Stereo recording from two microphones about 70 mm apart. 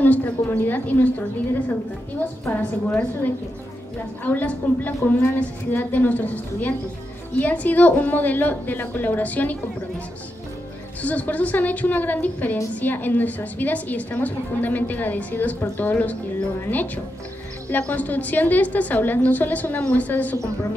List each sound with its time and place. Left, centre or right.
0.0 s a woman's voice: left
4.2 s a woman's voice: left
11.0 s a woman's voice: left